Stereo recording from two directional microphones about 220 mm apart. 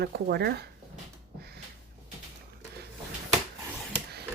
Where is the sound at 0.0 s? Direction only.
45° right (ahead or behind).